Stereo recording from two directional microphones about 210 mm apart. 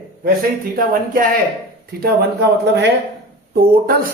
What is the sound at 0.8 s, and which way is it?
Speech, 40° right (ahead or behind).